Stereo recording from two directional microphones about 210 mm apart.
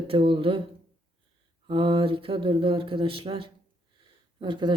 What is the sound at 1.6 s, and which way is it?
Speech, 25° right (ahead or behind).